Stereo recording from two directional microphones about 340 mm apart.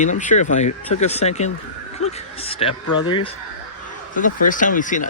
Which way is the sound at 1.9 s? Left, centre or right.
Centre.